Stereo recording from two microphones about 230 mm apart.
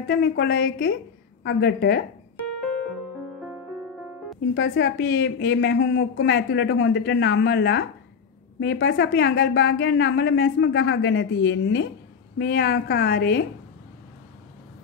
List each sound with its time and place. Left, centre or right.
0.1 s a woman's voice: left
4.6 s a woman's voice: left